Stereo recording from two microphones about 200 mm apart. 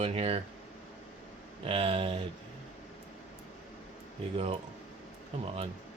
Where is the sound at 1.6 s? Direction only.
30° right (ahead or behind).